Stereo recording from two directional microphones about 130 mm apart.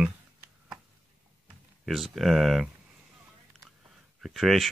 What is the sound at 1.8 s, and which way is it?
Speech, centre (ahead or behind).